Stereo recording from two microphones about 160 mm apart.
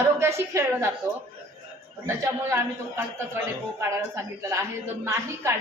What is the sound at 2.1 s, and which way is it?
A woman's voice, 15° right (ahead or behind).